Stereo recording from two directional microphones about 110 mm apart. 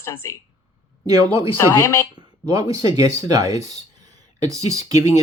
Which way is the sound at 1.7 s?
25° left (ahead or behind).